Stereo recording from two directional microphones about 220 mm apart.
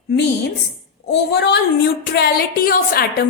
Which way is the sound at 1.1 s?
50° left (ahead or behind).